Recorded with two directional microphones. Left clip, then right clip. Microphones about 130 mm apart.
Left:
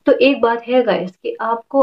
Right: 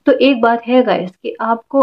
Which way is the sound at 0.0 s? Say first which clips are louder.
Right 1 dB; 25° right (ahead or behind).